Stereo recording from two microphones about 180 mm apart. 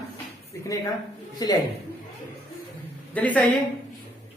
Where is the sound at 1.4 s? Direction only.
20° left (ahead or behind).